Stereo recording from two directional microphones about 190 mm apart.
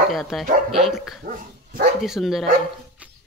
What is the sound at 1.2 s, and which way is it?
Dog, 50° right (ahead or behind).